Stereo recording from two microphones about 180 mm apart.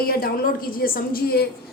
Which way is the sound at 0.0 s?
55° left (ahead or behind).